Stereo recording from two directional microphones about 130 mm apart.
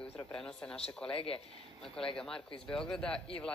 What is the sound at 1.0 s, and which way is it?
Speech, 45° left (ahead or behind).